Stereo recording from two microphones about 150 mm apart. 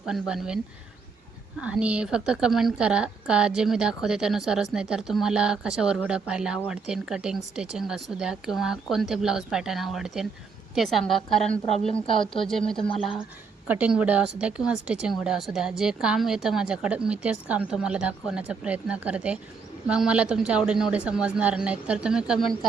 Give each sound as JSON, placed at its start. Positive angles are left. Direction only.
{"t": 0.0, "sound": "a woman's voice", "side_deg": -5}
{"t": 12.2, "sound": "speech", "side_deg": 35}
{"t": 12.5, "sound": "a woman's voice", "side_deg": 0}
{"t": 13.7, "sound": "a woman's voice", "side_deg": -10}